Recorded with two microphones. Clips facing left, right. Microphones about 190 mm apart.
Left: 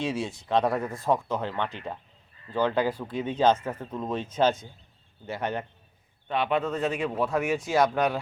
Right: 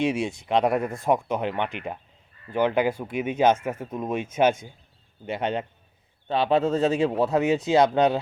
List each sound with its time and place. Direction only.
0.0 s speech: 15° right (ahead or behind)
6.2 s speech: 30° right (ahead or behind)